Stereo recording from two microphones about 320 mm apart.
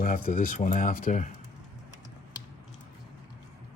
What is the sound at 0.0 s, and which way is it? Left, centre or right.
Speech, left.